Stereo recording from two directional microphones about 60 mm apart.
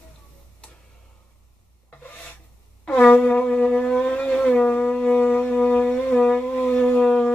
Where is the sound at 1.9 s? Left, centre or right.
Left.